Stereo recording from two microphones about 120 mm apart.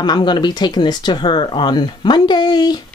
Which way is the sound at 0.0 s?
40° left (ahead or behind).